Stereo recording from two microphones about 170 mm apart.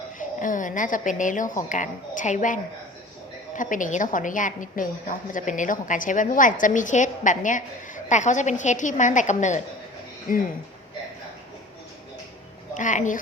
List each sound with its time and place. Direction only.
0.2 s a woman's voice: 50° left (ahead or behind)
12.7 s a woman's voice: 50° left (ahead or behind)